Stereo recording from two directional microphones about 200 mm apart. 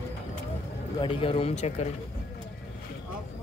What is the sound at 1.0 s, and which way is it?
Speech, 25° left (ahead or behind).